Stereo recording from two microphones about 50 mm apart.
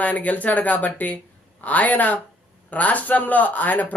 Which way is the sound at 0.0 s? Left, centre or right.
Left.